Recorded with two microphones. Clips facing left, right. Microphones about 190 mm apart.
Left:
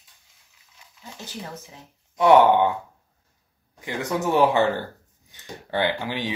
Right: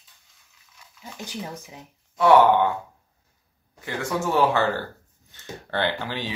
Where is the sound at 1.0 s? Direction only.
15° right (ahead or behind).